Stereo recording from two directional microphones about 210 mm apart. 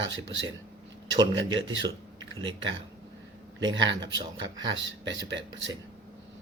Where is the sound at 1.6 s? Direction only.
65° right (ahead or behind).